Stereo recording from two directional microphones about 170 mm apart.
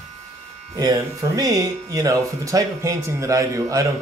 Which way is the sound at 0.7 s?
20° right (ahead or behind).